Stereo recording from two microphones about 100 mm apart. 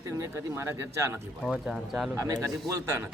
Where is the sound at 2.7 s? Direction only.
25° right (ahead or behind).